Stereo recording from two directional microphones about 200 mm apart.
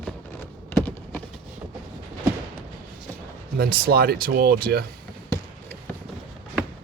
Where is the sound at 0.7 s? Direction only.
10° left (ahead or behind).